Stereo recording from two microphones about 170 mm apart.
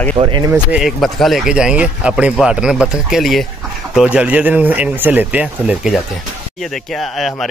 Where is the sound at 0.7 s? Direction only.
Centre (ahead or behind).